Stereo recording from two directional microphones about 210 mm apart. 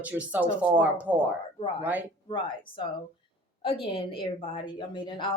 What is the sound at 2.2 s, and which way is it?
A woman's voice, 25° left (ahead or behind).